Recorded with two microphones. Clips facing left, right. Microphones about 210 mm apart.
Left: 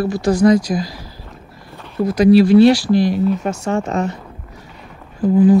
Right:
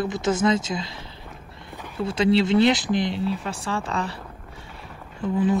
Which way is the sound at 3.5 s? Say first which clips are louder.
Left 8 dB; 30° right (ahead or behind).